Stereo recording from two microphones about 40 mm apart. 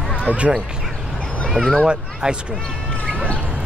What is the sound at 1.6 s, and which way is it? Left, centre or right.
Speech, right.